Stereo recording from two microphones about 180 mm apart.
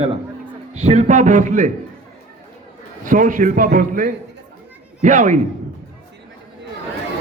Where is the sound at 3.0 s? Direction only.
45° right (ahead or behind).